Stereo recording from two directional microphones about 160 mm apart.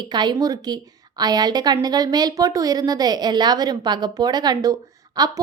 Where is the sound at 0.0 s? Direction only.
25° right (ahead or behind).